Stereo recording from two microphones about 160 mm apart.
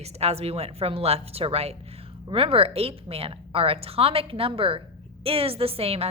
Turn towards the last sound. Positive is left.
turn(degrees=-40)  # may be behind; listen again after turning